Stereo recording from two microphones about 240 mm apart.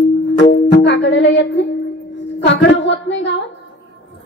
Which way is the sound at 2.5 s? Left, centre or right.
Left.